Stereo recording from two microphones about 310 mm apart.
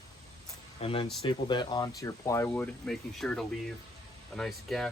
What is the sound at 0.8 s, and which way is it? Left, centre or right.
Speech, centre.